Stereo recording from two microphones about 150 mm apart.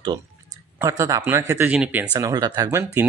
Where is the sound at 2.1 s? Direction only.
25° right (ahead or behind).